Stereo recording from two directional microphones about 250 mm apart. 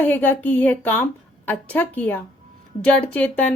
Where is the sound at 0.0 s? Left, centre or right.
Centre.